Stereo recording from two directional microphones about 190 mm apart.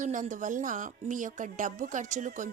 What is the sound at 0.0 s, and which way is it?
Speech, 40° right (ahead or behind).